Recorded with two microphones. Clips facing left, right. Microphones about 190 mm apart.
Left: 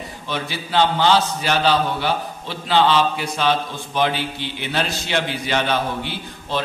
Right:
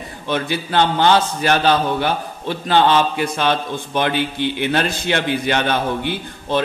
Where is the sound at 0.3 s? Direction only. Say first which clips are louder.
Right 5 dB; 55° right (ahead or behind).